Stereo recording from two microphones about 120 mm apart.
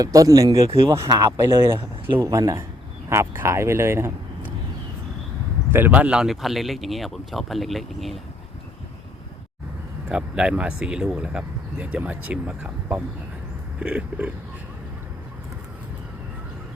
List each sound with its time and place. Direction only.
0.0 s a man's voice: 30° right (ahead or behind)
5.7 s speech: 15° right (ahead or behind)
10.1 s speech: 10° right (ahead or behind)